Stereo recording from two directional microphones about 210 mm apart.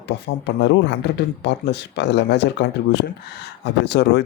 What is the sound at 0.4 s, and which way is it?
Speech, 55° left (ahead or behind).